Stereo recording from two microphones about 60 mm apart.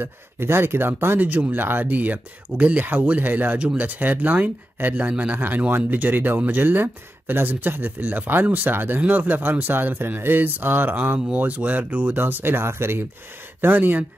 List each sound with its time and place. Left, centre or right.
0.0 s speech: right